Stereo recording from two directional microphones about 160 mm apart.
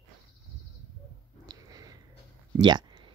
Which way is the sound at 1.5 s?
25° right (ahead or behind).